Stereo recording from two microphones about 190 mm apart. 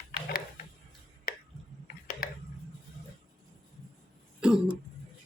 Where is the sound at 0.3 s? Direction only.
50° left (ahead or behind).